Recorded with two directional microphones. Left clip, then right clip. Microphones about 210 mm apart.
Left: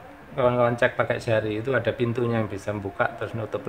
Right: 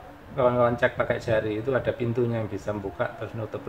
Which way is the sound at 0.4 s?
40° left (ahead or behind).